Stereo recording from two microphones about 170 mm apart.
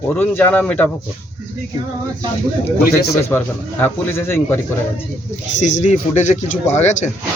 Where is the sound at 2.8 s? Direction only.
65° left (ahead or behind).